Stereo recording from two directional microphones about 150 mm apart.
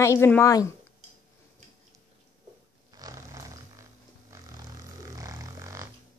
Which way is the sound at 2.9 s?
25° right (ahead or behind).